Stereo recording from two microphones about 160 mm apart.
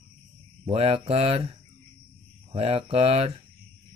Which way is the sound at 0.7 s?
40° right (ahead or behind).